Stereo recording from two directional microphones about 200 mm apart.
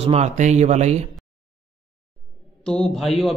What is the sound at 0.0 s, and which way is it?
Speech, 35° right (ahead or behind).